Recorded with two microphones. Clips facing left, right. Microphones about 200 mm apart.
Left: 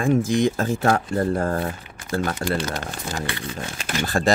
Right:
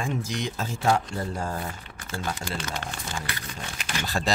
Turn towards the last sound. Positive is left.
turn(degrees=50)  # may be behind; listen again after turning